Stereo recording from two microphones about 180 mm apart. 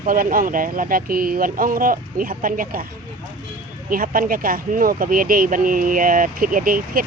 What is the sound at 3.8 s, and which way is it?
Speech, 50° right (ahead or behind).